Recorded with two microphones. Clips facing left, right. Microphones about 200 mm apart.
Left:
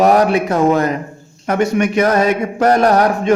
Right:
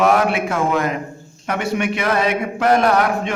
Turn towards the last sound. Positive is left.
turn(degrees=40)  # may be behind; listen again after turning